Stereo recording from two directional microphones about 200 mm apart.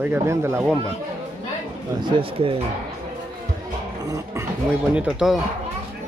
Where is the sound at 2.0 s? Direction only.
25° right (ahead or behind).